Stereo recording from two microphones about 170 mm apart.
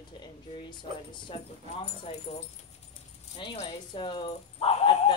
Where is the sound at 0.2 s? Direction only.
25° left (ahead or behind).